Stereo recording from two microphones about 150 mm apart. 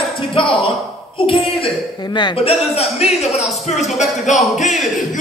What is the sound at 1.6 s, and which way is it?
A man's voice, 30° left (ahead or behind).